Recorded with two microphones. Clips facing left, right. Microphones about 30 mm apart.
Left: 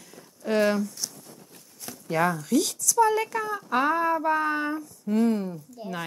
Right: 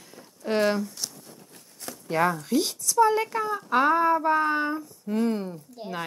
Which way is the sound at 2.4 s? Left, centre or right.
Right.